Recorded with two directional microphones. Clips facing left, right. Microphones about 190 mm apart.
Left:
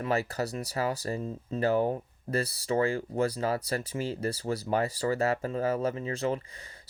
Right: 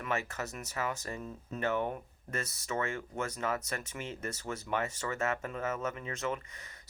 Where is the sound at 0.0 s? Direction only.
35° left (ahead or behind).